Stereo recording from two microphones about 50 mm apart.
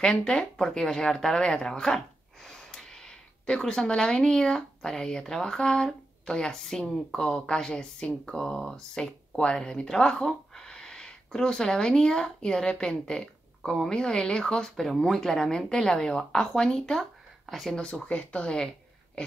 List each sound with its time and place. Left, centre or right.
0.0 s a woman's voice: centre
18.0 s speech: left